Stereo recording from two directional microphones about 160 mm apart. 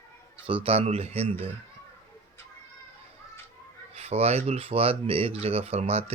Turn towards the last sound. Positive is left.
turn(degrees=-40)  # may be behind; listen again after turning